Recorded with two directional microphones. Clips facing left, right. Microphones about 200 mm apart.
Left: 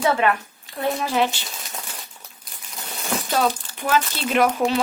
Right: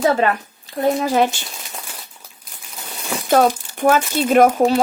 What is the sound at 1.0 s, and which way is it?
Speech, 45° right (ahead or behind).